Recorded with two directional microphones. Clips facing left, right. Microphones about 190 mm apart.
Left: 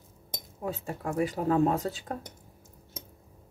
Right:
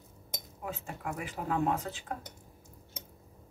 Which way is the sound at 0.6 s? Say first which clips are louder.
Left 6 dB; 35° left (ahead or behind).